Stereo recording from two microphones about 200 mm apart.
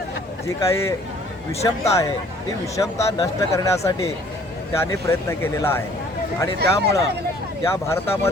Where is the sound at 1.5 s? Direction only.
30° left (ahead or behind).